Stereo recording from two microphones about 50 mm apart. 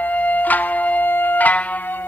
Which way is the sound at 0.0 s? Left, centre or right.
Left.